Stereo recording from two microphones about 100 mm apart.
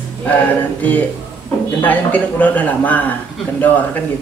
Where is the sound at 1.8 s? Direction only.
15° left (ahead or behind).